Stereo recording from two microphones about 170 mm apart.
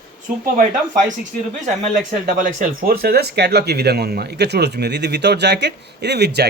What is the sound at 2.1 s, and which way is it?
Speech, 55° right (ahead or behind).